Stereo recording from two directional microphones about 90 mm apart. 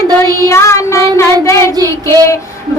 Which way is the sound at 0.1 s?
50° right (ahead or behind).